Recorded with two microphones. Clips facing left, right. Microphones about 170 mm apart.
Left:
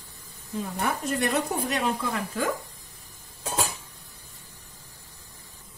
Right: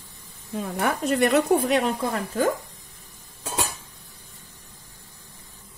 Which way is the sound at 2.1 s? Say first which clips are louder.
Right 5 dB; 40° right (ahead or behind).